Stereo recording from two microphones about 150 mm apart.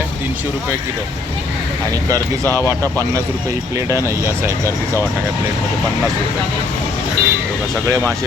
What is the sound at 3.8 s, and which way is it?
Speech, 20° right (ahead or behind).